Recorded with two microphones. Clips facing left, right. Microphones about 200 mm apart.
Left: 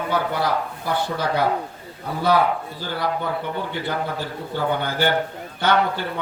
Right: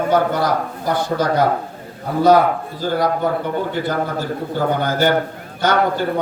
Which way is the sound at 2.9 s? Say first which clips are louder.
Right 6 dB; 45° right (ahead or behind).